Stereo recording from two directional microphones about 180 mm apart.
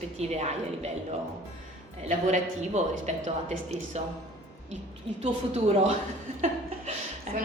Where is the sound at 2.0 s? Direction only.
40° right (ahead or behind).